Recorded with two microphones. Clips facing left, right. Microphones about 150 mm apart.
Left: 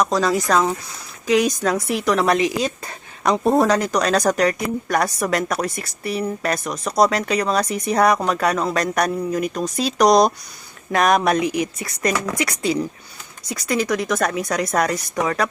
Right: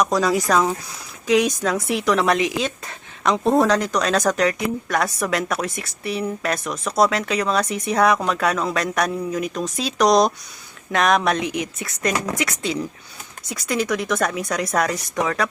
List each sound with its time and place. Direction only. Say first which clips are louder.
0.0 s a woman's voice: even; 10° right (ahead or behind)
12.1 s a woman's voice: even; 25° right (ahead or behind)
12.4 s a woman's voice: left 3 dB; centre (ahead or behind)